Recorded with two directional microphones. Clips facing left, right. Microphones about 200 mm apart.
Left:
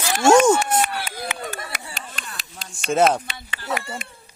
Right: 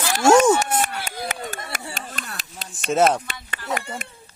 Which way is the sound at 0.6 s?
45° right (ahead or behind).